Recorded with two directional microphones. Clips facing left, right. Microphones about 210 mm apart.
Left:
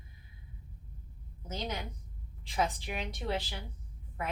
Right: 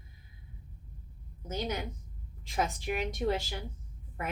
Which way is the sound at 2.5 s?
45° right (ahead or behind).